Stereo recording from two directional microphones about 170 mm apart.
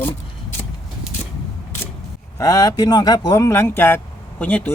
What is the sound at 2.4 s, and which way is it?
Speech, 20° left (ahead or behind).